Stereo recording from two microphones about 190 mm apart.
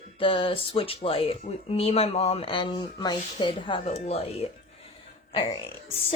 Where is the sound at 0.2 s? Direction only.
25° left (ahead or behind).